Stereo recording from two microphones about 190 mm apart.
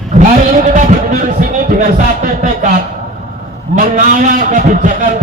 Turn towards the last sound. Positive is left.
turn(degrees=-40)  # may be behind; listen again after turning